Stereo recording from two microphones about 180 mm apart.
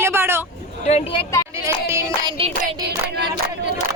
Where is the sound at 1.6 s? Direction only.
15° right (ahead or behind).